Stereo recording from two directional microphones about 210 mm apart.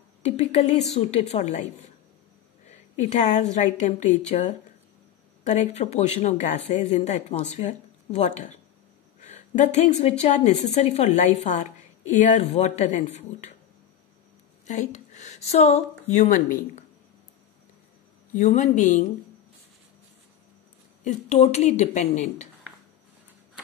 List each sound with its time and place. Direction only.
0.4 s a woman's voice: 30° left (ahead or behind)
14.7 s a woman's voice: 35° left (ahead or behind)
18.3 s a woman's voice: 35° left (ahead or behind)
21.0 s a woman's voice: 35° left (ahead or behind)